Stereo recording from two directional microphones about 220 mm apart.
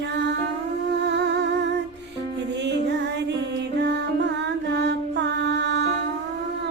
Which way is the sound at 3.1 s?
50° right (ahead or behind).